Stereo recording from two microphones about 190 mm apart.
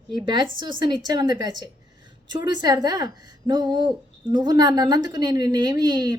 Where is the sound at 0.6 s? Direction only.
25° right (ahead or behind).